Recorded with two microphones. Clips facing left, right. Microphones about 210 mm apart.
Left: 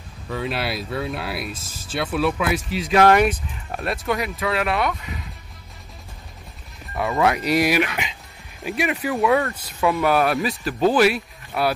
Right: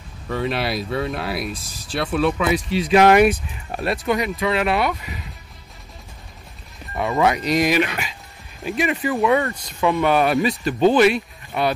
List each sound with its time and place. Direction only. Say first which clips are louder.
0.3 s speech: right 3 dB; centre (ahead or behind)
3.0 s speech: right 2 dB; 15° right (ahead or behind)
3.7 s speech: right 3 dB; centre (ahead or behind)
7.0 s speech: right 1 dB; centre (ahead or behind)